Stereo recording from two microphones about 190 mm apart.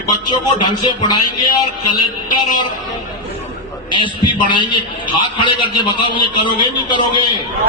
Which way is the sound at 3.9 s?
25° left (ahead or behind).